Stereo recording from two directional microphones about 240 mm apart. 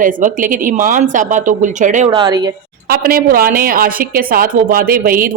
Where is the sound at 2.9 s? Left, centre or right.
Right.